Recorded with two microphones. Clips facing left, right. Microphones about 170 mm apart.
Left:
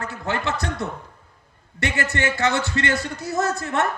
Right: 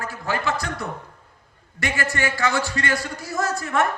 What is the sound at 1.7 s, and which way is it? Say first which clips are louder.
A man's voice: left 1 dB; 20° left (ahead or behind).